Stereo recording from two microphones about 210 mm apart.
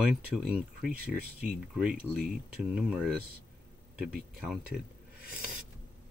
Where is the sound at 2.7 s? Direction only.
5° right (ahead or behind).